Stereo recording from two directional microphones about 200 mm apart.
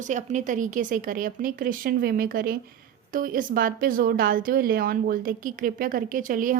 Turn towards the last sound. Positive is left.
turn(degrees=-45)  # may be behind; listen again after turning